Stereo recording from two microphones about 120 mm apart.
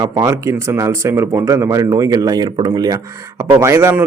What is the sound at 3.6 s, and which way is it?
Speech, 20° right (ahead or behind).